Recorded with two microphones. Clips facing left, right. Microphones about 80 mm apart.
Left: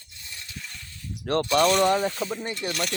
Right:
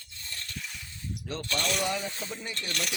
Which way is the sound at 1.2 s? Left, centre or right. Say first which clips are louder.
Left 14 dB; left.